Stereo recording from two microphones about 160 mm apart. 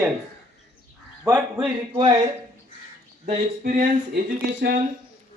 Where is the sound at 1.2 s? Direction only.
20° right (ahead or behind).